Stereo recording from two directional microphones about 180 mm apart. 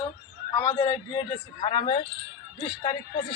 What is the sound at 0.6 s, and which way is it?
A man's voice, 15° left (ahead or behind).